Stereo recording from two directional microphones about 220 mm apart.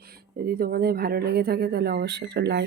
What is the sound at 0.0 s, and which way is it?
Speech, 45° right (ahead or behind).